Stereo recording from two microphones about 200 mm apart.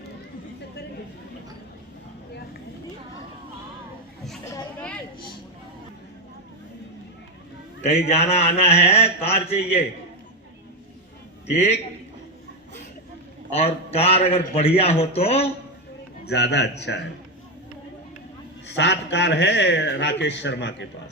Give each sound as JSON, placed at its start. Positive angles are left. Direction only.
{"t": 4.4, "sound": "children playing", "side_deg": 10}
{"t": 7.8, "sound": "a man's voice", "side_deg": 30}
{"t": 11.4, "sound": "a man's voice", "side_deg": 30}
{"t": 13.5, "sound": "a man's voice", "side_deg": 30}
{"t": 16.2, "sound": "a man's voice", "side_deg": 55}
{"t": 18.8, "sound": "a man's voice", "side_deg": 60}